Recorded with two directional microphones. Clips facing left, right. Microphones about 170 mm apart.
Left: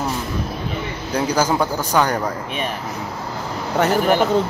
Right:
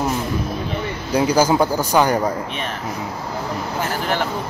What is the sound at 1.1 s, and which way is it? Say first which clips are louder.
Speech: right 3 dB; 10° right (ahead or behind).